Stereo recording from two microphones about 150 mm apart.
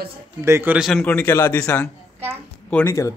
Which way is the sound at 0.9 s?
10° left (ahead or behind).